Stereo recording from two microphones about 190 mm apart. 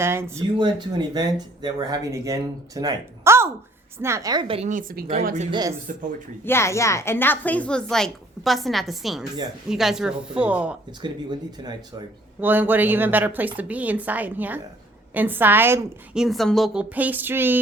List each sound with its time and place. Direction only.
0.0 s speech: 15° right (ahead or behind); by 4.7 s 30° right (ahead or behind)
4.7 s speech: 45° right (ahead or behind)
5.5 s speech: 20° right (ahead or behind)
6.4 s a woman's voice: 15° left (ahead or behind); by 10.8 s 5° right (ahead or behind)
11.0 s speech: 20° right (ahead or behind)
12.4 s speech: 10° right (ahead or behind)